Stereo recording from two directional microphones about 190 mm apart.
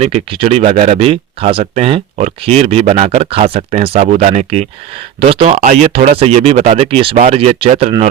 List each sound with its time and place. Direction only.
0.0 s speech: 30° right (ahead or behind)